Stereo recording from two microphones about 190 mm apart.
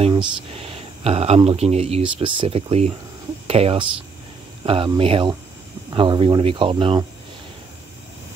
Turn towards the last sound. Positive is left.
turn(degrees=-30)  # may be behind; listen again after turning